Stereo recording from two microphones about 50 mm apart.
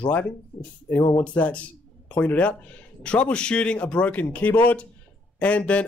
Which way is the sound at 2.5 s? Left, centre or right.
Left.